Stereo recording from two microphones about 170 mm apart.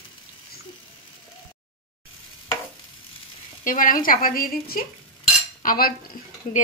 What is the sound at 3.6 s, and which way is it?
Speech, 55° left (ahead or behind).